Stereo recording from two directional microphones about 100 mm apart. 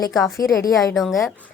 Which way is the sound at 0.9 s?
Centre (ahead or behind).